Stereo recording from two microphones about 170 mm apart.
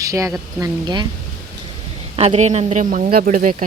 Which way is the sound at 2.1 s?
35° right (ahead or behind).